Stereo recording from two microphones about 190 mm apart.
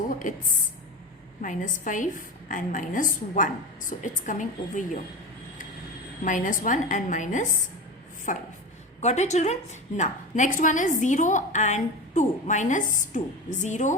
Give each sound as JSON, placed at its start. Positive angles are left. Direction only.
{"t": 0.2, "sound": "a woman's voice", "side_deg": 40}
{"t": 6.2, "sound": "a woman's voice", "side_deg": 45}